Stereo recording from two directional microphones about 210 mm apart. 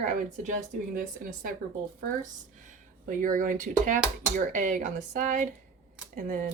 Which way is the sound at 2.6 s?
40° right (ahead or behind).